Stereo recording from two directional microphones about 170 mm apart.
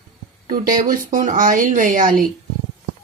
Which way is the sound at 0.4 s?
55° right (ahead or behind).